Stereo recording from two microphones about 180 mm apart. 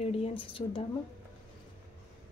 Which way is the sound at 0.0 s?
30° left (ahead or behind).